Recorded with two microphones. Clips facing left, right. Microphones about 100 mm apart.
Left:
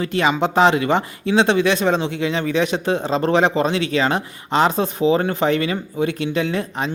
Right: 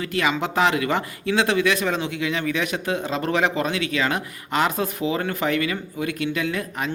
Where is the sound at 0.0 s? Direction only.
25° left (ahead or behind).